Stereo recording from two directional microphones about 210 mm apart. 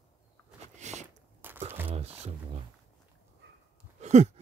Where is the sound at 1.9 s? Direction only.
30° right (ahead or behind).